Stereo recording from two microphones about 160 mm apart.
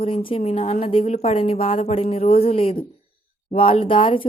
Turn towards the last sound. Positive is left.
turn(degrees=35)  # may be behind; listen again after turning